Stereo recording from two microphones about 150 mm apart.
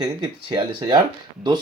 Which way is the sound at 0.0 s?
30° right (ahead or behind).